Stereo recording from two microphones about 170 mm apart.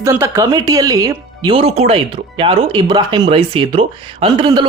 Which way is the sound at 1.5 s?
35° right (ahead or behind).